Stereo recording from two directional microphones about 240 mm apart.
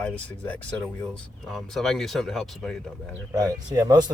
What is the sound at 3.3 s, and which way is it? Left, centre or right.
Speech, centre.